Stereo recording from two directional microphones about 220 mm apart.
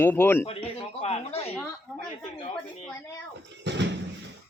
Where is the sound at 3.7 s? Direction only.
55° right (ahead or behind).